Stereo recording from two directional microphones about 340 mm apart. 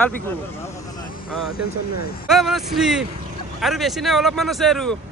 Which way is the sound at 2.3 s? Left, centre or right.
Centre.